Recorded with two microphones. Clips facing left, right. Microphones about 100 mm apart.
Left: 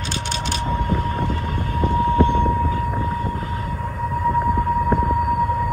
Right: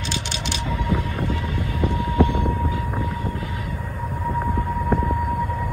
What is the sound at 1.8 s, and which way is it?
Vehicle, 40° left (ahead or behind).